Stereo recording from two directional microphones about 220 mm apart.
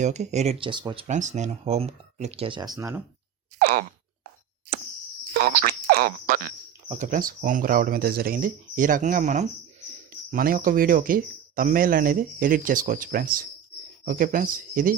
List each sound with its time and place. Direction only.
0.0 s speech: 30° right (ahead or behind)
1.0 s speech: 35° right (ahead or behind); by 3.0 s 15° right (ahead or behind)
5.3 s frog: 40° right (ahead or behind)
6.8 s speech: 35° right (ahead or behind)